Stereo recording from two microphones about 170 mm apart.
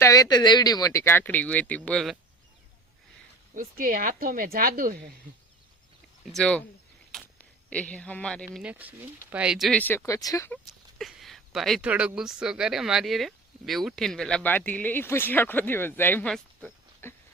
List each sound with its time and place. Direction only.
0.0 s speech: 20° left (ahead or behind); by 2.1 s 5° left (ahead or behind)
3.5 s speech: 55° right (ahead or behind)
6.3 s speech: 5° left (ahead or behind)
7.1 s a sound: centre (ahead or behind)
7.7 s speech: 5° left (ahead or behind)
8.5 s speech: 10° right (ahead or behind)
9.8 s speech: 15° left (ahead or behind)
10.9 s speech: centre (ahead or behind)